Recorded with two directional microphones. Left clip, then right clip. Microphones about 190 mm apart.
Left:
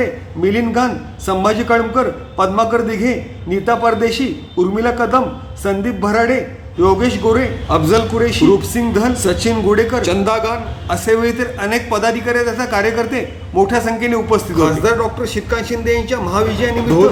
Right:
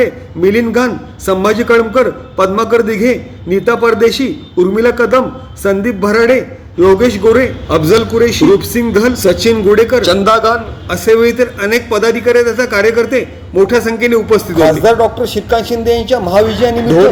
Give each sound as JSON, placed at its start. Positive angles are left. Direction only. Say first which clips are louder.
{"t": 0.0, "sound": "a man's voice", "louder": "right 6 dB", "side_deg": -15}
{"t": 15.5, "sound": "a man's voice", "louder": "right 5 dB", "side_deg": 70}